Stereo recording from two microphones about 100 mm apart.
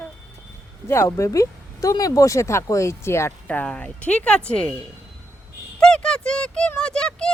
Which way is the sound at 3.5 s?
10° left (ahead or behind).